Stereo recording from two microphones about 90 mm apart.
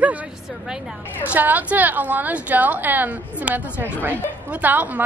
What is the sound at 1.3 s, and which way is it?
A woman's voice, 20° right (ahead or behind).